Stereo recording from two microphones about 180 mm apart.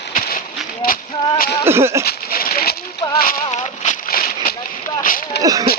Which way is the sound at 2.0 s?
55° left (ahead or behind).